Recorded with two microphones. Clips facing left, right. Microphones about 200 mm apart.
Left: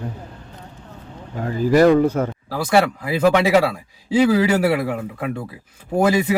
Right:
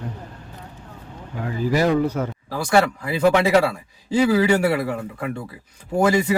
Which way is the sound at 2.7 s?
5° left (ahead or behind).